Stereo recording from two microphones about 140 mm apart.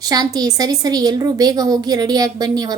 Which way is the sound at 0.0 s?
25° right (ahead or behind).